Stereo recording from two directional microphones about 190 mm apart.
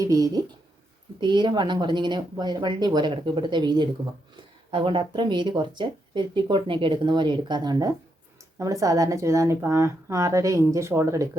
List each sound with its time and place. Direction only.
0.0 s a woman's voice: 20° right (ahead or behind)